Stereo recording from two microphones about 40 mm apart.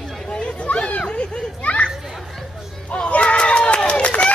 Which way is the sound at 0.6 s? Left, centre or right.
Left.